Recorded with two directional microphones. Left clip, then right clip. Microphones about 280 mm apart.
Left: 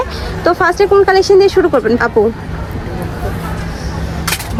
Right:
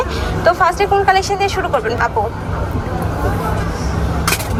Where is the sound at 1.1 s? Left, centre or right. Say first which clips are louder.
Left 7 dB; left.